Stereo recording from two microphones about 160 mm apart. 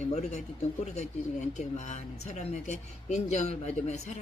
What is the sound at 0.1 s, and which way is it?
Speech, 45° left (ahead or behind).